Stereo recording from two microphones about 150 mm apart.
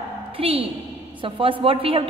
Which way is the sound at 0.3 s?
40° right (ahead or behind).